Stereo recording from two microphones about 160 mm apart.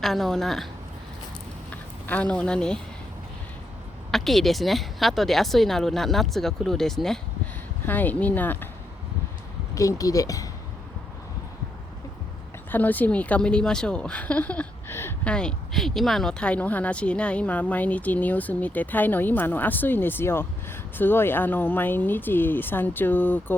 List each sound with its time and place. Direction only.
0.0 s speech: centre (ahead or behind)
1.7 s speech: 10° left (ahead or behind)
4.1 s a woman's voice: centre (ahead or behind)
9.7 s speech: 20° left (ahead or behind)
12.7 s a woman's voice: 10° left (ahead or behind)